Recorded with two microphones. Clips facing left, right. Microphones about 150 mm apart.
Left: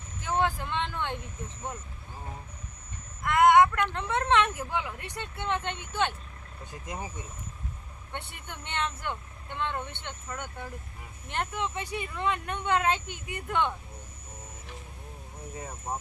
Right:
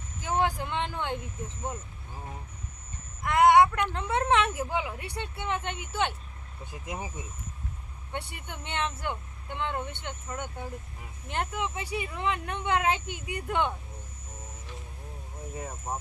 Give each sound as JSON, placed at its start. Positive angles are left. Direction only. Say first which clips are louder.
{"t": 0.3, "sound": "vehicle", "louder": "even", "side_deg": -20}
{"t": 3.2, "sound": "speech", "louder": "even", "side_deg": -15}
{"t": 8.1, "sound": "speech", "louder": "right 3 dB", "side_deg": -15}
{"t": 15.5, "sound": "speech", "louder": "even", "side_deg": 0}